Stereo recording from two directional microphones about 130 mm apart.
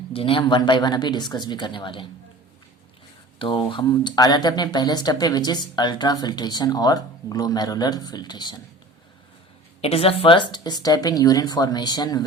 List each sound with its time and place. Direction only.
0.1 s speech: 45° left (ahead or behind)
3.3 s speech: 40° left (ahead or behind)
9.8 s speech: 50° left (ahead or behind); by 12.2 s 30° left (ahead or behind)